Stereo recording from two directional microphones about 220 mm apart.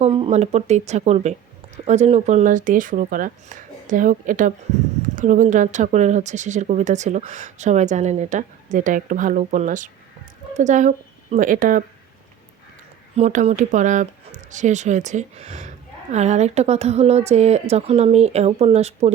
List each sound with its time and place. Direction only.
0.0 s speech: 25° right (ahead or behind)
13.1 s speech: 30° right (ahead or behind)